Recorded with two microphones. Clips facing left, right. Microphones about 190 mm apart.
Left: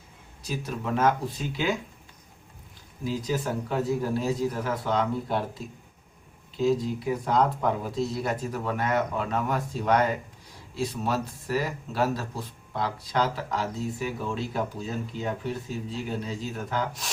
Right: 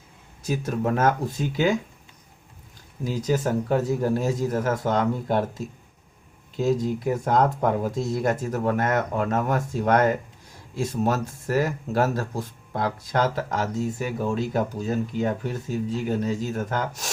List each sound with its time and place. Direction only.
0.4 s speech: 50° right (ahead or behind)
3.1 s speech: 45° right (ahead or behind)